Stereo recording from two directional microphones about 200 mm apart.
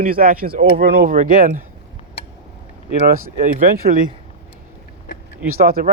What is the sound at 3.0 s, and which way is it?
Speech, 45° right (ahead or behind).